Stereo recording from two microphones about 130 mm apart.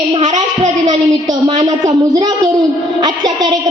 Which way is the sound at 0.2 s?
65° right (ahead or behind).